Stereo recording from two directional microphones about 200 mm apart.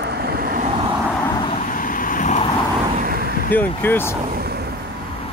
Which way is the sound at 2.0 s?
40° left (ahead or behind).